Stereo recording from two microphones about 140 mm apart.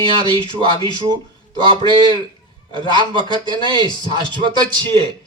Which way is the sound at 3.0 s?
35° right (ahead or behind).